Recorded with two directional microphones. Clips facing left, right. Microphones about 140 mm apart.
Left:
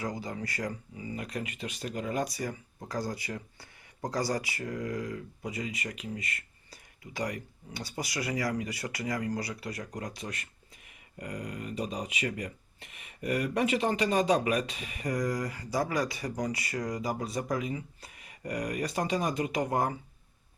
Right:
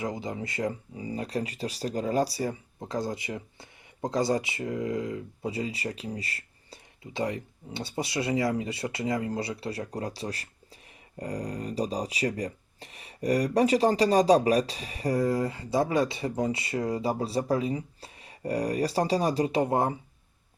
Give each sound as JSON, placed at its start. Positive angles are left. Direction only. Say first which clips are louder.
{"t": 0.0, "sound": "speech", "louder": "right 3 dB", "side_deg": -20}